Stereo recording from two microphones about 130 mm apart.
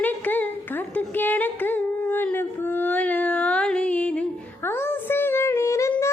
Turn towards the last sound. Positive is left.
turn(degrees=20)  # may be behind; listen again after turning